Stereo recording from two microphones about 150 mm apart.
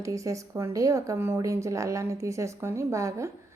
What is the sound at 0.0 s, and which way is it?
A woman's voice, 20° right (ahead or behind).